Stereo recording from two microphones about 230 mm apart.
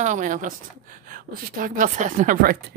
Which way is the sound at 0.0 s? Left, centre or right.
Right.